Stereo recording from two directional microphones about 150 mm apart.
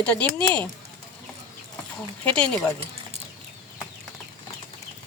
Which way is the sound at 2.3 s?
10° left (ahead or behind).